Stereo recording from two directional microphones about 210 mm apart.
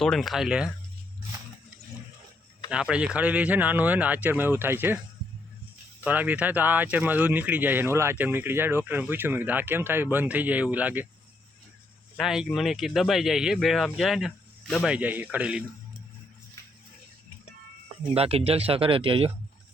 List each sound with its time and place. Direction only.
0.0 s speech: centre (ahead or behind)
2.6 s speech: 5° right (ahead or behind)
6.0 s speech: 10° right (ahead or behind)
12.1 s speech: centre (ahead or behind)
18.1 s speech: 30° right (ahead or behind)